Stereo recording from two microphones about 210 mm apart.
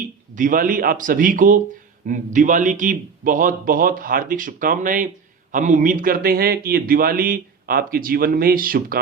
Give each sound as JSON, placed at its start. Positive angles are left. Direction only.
{"t": 0.3, "sound": "a man's voice", "side_deg": -40}